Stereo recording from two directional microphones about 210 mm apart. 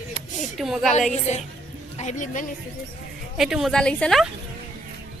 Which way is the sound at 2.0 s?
35° left (ahead or behind).